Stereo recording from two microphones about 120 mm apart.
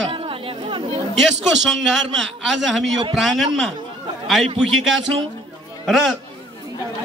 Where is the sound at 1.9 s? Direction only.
Centre (ahead or behind).